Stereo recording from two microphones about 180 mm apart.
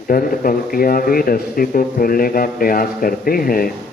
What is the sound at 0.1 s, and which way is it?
A man's voice, 50° left (ahead or behind).